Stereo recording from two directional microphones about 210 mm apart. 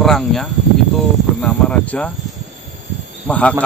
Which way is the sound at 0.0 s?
Centre (ahead or behind).